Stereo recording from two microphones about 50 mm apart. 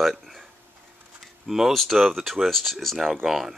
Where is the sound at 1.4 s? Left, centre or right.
Centre.